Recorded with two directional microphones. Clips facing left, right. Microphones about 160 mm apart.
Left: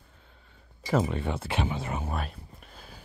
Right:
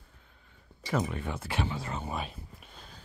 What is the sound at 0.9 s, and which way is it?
Speech, 30° left (ahead or behind).